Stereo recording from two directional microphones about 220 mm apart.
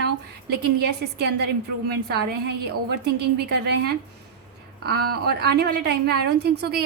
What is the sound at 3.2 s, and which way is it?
Speech, 50° right (ahead or behind).